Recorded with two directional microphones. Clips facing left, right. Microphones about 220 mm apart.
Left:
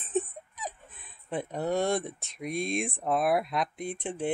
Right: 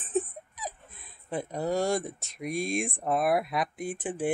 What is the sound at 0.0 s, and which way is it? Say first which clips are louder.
Speech: right 1 dB; centre (ahead or behind).